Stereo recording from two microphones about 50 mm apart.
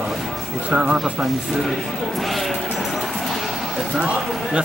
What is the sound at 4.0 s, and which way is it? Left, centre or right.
Speech, right.